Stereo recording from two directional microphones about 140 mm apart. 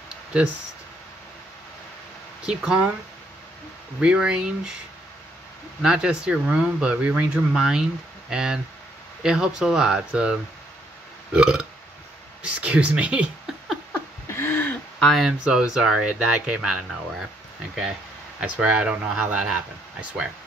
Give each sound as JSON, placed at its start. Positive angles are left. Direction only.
{"t": 2.4, "sound": "speech", "side_deg": -5}
{"t": 4.0, "sound": "speech", "side_deg": -5}
{"t": 5.8, "sound": "speech", "side_deg": -5}
{"t": 11.3, "sound": "speech", "side_deg": -5}
{"t": 14.2, "sound": "speech", "side_deg": 15}
{"t": 18.4, "sound": "speech", "side_deg": -10}